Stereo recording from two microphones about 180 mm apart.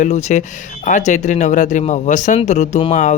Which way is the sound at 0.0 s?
40° left (ahead or behind).